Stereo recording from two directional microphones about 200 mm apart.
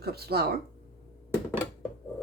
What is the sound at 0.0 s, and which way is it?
Speech, 50° right (ahead or behind).